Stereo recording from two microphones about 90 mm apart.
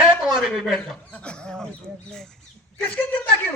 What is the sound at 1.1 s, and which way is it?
Speech, 10° left (ahead or behind).